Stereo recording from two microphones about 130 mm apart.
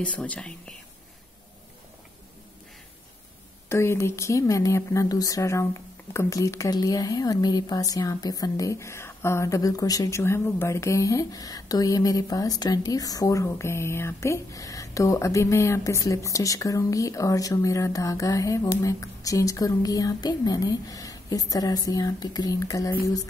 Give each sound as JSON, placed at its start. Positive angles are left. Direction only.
{"t": 0.0, "sound": "speech", "side_deg": 10}
{"t": 3.6, "sound": "speech", "side_deg": 20}